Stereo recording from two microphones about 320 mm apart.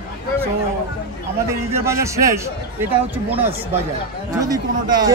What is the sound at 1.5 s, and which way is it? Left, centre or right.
Speech, centre.